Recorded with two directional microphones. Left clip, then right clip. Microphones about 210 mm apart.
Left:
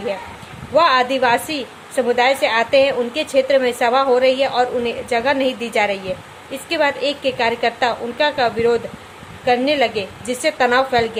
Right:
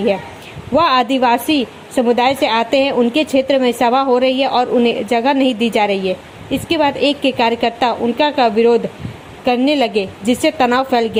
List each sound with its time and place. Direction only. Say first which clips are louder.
0.8 s a woman's voice: right 1 dB; 30° right (ahead or behind)